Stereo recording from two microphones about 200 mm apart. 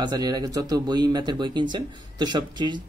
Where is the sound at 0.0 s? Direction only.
20° right (ahead or behind).